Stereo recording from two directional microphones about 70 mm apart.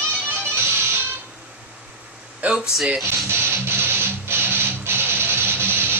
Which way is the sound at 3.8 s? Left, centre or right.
Right.